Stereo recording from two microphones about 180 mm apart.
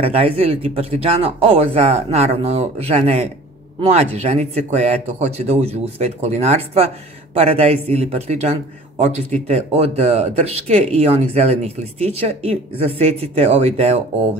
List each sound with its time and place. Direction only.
0.0 s speech: 35° right (ahead or behind)